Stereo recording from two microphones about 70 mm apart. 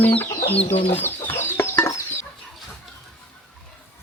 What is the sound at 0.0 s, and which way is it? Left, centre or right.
Speech, left.